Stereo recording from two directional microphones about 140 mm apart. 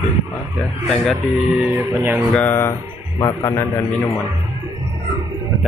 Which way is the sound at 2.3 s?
15° left (ahead or behind).